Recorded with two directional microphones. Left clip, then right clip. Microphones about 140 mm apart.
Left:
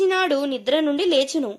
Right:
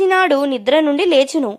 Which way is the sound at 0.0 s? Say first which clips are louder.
Right 6 dB; 20° right (ahead or behind).